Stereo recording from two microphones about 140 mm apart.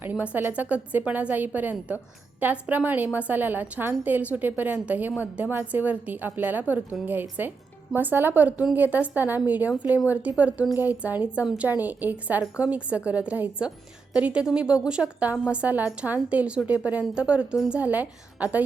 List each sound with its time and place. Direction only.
0.0 s a woman's voice: 10° right (ahead or behind)